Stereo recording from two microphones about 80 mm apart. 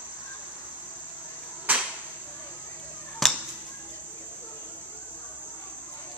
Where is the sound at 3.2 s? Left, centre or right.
Centre.